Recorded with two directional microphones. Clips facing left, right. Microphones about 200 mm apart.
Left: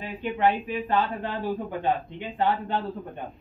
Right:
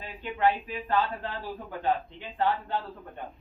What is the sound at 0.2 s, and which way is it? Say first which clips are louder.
Speech: left 2 dB; 20° left (ahead or behind).